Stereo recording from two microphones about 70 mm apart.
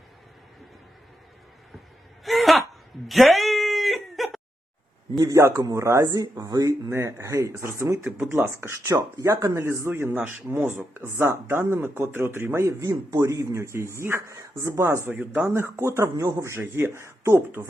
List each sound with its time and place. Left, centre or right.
2.2 s a sound: centre
5.3 s speech: right
6.9 s speech: right
8.9 s speech: right
9.2 s speech: right
9.9 s speech: right
12.5 s speech: right
15.2 s speech: right
15.8 s speech: right